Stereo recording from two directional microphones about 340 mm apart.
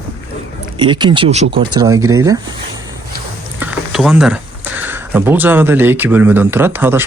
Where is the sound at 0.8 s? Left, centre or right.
Centre.